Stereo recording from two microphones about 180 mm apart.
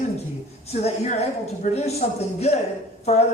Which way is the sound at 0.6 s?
35° left (ahead or behind).